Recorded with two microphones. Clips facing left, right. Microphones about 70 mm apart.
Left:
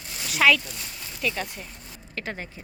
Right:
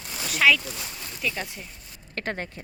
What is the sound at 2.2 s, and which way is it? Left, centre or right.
Speech, right.